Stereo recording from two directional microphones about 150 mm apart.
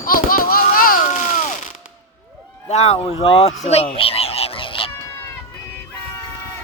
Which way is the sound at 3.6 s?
45° left (ahead or behind).